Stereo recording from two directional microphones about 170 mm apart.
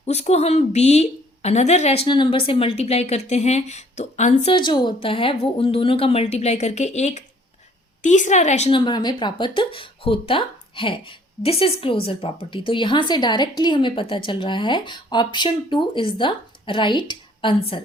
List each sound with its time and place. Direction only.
0.0 s a woman's voice: 40° left (ahead or behind)
4.5 s a woman's voice: 25° left (ahead or behind)
8.8 s speech: 25° left (ahead or behind)